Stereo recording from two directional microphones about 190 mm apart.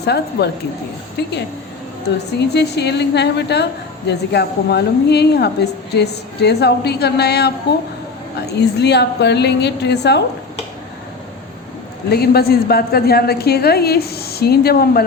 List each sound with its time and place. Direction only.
0.0 s a woman's voice: 60° left (ahead or behind)
2.4 s a woman's voice: 60° left (ahead or behind)
8.5 s a woman's voice: 60° left (ahead or behind)
12.1 s a woman's voice: 55° left (ahead or behind)